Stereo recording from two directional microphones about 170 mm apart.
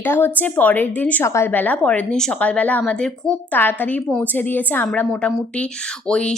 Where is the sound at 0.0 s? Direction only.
10° left (ahead or behind).